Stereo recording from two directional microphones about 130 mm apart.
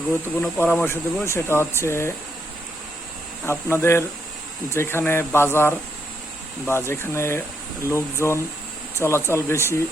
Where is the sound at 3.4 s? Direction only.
20° left (ahead or behind).